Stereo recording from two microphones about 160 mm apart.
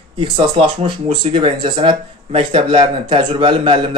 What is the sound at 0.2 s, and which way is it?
Speech, 35° right (ahead or behind).